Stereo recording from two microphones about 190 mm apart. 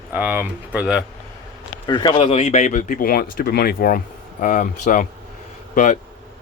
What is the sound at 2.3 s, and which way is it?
Speech, 40° left (ahead or behind).